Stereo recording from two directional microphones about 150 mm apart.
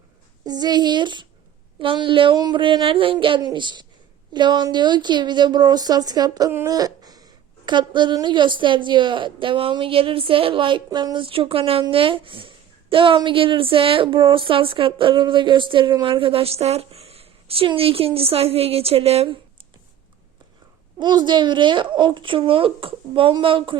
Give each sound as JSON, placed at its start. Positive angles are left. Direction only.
{"t": 0.4, "sound": "a woman's voice", "side_deg": -25}
{"t": 21.0, "sound": "speech", "side_deg": -30}